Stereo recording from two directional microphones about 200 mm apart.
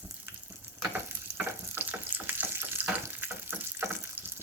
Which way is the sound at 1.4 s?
10° right (ahead or behind).